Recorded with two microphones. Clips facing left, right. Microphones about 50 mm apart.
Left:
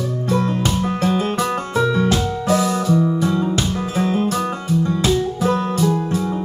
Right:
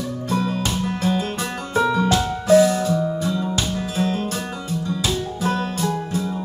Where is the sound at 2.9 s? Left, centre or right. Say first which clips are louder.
Left 4 dB; left.